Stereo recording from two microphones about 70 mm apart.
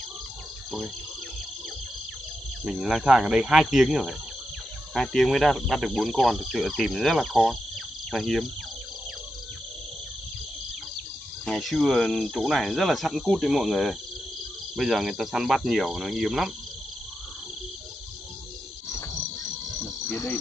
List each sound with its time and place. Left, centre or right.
2.7 s speech: centre
11.4 s speech: centre
19.8 s cricket: left